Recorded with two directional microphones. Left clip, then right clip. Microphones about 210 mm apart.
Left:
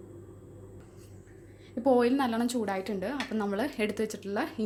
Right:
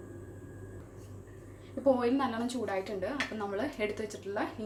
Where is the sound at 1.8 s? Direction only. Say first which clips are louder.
Left 3 dB; 50° left (ahead or behind).